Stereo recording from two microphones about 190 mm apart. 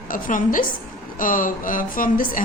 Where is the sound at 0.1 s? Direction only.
45° left (ahead or behind).